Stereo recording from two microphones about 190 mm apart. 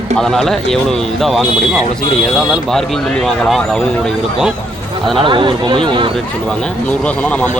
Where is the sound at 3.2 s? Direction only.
Centre (ahead or behind).